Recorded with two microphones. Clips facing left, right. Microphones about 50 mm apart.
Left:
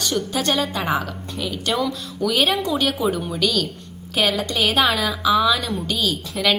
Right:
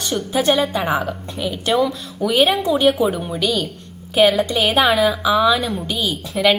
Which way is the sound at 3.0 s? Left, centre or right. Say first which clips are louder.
Right 2 dB; centre.